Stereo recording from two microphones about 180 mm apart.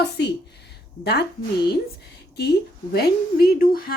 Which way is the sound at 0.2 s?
70° left (ahead or behind).